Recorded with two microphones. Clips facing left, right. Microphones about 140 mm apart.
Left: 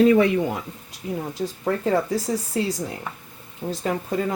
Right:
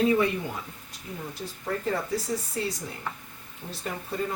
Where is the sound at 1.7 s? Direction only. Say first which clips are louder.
Left 6 dB; 90° left.